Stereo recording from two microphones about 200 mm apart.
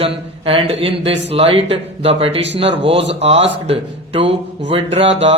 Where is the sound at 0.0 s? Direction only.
30° right (ahead or behind).